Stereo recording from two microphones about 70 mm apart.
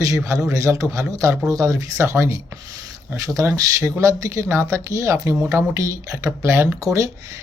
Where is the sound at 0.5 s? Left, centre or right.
Right.